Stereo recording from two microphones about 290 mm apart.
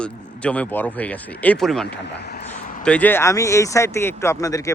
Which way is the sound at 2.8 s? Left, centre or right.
Centre.